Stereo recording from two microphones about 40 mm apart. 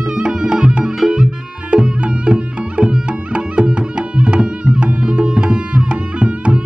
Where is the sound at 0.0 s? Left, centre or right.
Centre.